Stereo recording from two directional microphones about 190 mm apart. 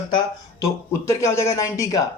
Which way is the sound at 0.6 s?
15° left (ahead or behind).